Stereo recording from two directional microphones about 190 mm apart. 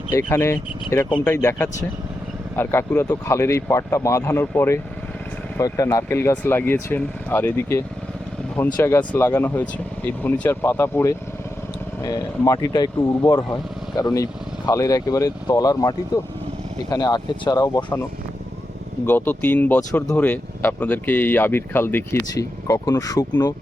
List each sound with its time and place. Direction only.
0.1 s speech: 15° left (ahead or behind)
19.0 s speech: 10° left (ahead or behind)